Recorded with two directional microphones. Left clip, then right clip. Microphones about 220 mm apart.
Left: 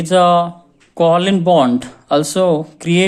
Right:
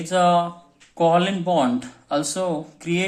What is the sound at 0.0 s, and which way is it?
Speech, 40° left (ahead or behind).